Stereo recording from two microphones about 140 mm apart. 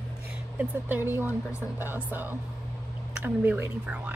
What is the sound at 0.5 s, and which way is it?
Speech, 15° right (ahead or behind).